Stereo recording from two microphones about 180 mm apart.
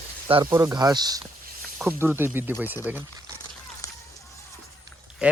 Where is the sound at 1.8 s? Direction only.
10° right (ahead or behind).